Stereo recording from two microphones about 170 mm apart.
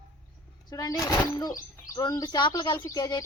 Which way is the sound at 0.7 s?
20° left (ahead or behind).